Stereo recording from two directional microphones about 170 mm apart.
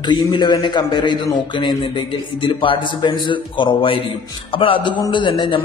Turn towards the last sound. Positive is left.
turn(degrees=30)  # may be behind; listen again after turning